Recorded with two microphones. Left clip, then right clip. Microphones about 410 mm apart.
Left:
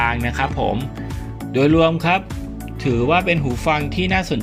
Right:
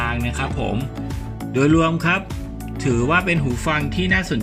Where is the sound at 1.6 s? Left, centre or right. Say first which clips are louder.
Left 2 dB; centre.